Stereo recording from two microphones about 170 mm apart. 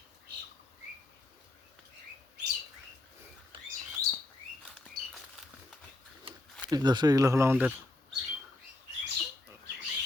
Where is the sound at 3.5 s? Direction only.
30° right (ahead or behind).